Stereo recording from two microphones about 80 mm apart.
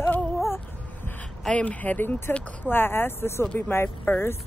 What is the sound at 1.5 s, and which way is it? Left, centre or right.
Speech, centre.